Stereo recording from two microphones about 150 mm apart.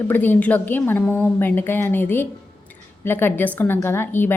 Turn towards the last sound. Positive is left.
turn(degrees=15)  # may be behind; listen again after turning